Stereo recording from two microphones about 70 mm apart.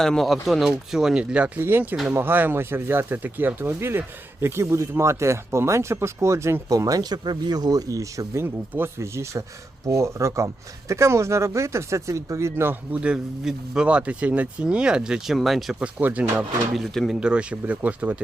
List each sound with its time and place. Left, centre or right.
0.0 s speech: centre
1.5 s speech: right
6.7 s speech: right
12.9 s speech: centre
15.8 s speech: right
16.4 s speech: centre
17.2 s speech: centre